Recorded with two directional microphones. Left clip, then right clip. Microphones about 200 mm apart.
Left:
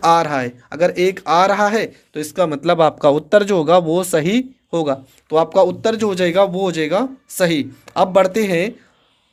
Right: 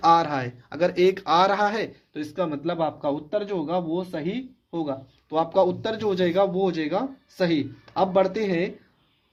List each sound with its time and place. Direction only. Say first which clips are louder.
0.0 s speech: left 5 dB; 30° left (ahead or behind)
2.2 s speech: left 10 dB; 35° left (ahead or behind)
5.3 s a man's voice: left 8 dB; 30° left (ahead or behind)